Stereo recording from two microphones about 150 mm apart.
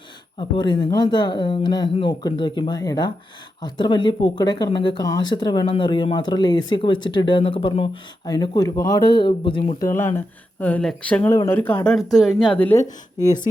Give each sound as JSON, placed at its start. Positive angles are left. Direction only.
{"t": 0.3, "sound": "speech", "side_deg": 30}
{"t": 8.3, "sound": "speech", "side_deg": 25}
{"t": 9.9, "sound": "speech", "side_deg": 15}
{"t": 12.5, "sound": "speech", "side_deg": 10}